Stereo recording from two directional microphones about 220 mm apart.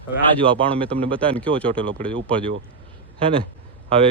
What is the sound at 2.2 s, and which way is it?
Speech, 25° right (ahead or behind).